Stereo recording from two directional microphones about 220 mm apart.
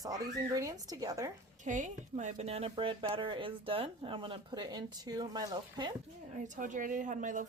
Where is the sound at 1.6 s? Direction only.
35° right (ahead or behind); by 5.9 s 20° right (ahead or behind).